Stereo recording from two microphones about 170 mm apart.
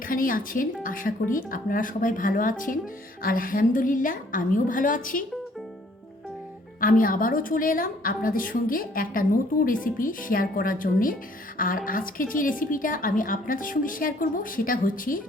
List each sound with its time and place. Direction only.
0.1 s speech: 55° left (ahead or behind)
6.7 s a woman's voice: 55° left (ahead or behind)